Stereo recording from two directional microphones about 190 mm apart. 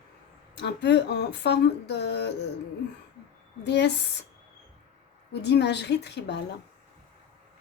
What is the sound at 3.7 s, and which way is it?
Speech, 60° left (ahead or behind).